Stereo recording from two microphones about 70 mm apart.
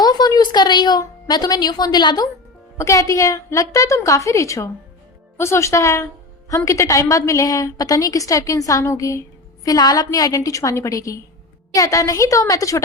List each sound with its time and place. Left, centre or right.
0.0 s a sound: left
2.7 s a woman's voice: left
9.6 s a woman's voice: left